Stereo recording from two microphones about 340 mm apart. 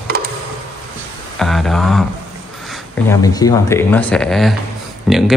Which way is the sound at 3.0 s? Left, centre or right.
Centre.